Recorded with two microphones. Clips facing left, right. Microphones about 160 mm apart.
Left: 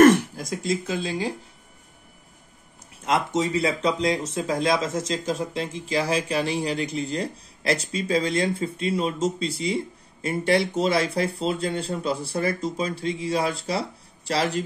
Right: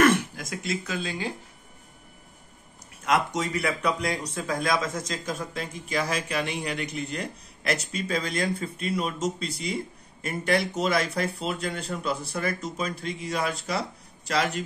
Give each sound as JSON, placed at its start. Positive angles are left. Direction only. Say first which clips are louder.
{"t": 0.0, "sound": "speech", "louder": "left 6 dB", "side_deg": 40}
{"t": 3.1, "sound": "speech", "louder": "left 2 dB", "side_deg": 25}